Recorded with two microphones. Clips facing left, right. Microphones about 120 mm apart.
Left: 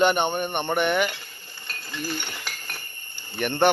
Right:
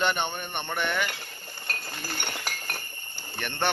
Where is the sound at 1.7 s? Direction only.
50° right (ahead or behind).